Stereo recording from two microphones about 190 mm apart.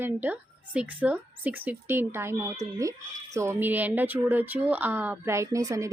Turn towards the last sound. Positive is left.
turn(degrees=-15)  # may be behind; listen again after turning